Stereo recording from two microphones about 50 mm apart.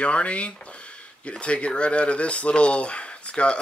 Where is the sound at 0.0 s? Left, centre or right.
Left.